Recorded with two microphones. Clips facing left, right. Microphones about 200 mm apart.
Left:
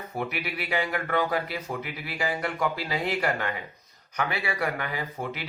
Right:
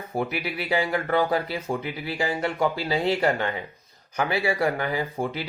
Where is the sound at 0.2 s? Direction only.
30° right (ahead or behind).